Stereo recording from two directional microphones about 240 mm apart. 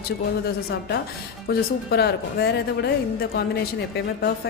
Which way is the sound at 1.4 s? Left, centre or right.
Left.